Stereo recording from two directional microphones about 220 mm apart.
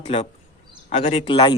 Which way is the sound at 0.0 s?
25° left (ahead or behind).